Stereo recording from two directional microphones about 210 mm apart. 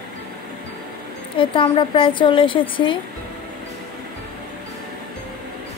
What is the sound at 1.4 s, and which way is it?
A woman's voice, 25° left (ahead or behind).